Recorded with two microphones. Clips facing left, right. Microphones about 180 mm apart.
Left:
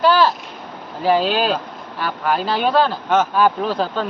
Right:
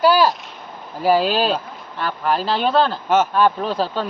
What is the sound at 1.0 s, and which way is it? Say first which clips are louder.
Speech: even; 5° right (ahead or behind).